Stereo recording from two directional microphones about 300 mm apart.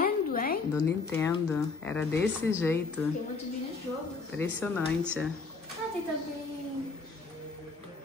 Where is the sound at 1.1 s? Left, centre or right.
Centre.